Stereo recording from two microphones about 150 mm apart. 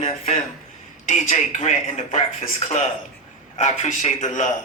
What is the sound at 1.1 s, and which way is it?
Speech, 55° left (ahead or behind).